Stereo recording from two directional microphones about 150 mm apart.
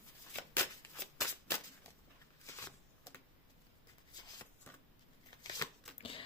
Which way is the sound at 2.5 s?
20° left (ahead or behind).